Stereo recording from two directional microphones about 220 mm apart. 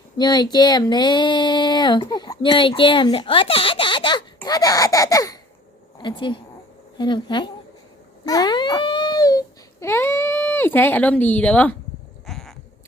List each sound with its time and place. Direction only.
0.2 s child singing: 20° left (ahead or behind)
4.4 s speech: 15° left (ahead or behind)
6.0 s child singing: 20° left (ahead or behind)
8.2 s speech: 15° left (ahead or behind)
12.2 s sheep: centre (ahead or behind)